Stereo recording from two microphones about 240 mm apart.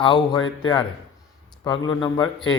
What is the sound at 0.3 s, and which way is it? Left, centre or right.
Speech, centre.